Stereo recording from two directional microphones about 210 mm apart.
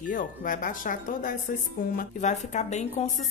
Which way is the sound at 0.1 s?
40° left (ahead or behind).